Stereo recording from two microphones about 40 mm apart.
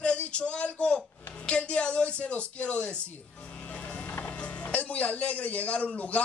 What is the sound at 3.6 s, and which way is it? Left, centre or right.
Vehicle, left.